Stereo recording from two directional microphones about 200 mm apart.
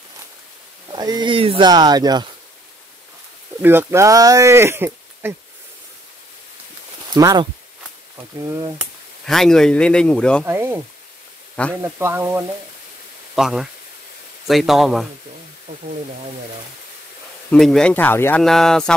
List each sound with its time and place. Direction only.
0.8 s speech: 20° right (ahead or behind)
3.6 s speech: 10° right (ahead or behind)
7.2 s speech: 15° right (ahead or behind)
8.5 s speech: 15° right (ahead or behind)
9.2 s speech: centre (ahead or behind)
10.4 s speech: 10° right (ahead or behind)
11.8 s speech: 10° right (ahead or behind)
17.5 s speech: centre (ahead or behind)